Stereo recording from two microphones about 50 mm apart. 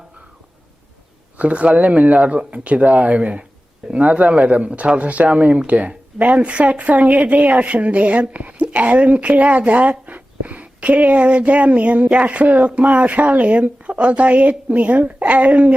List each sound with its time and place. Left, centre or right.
1.4 s speech: right